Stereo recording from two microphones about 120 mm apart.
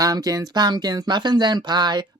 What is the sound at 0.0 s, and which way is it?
Speech, 30° right (ahead or behind).